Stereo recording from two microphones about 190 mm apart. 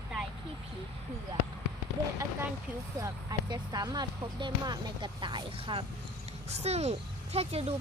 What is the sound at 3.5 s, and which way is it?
Speech, 20° right (ahead or behind).